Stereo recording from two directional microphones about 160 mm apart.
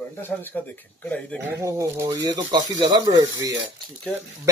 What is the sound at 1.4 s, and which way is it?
Speech, 20° right (ahead or behind).